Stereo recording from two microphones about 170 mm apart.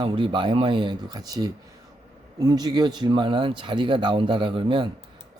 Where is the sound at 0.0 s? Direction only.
30° right (ahead or behind).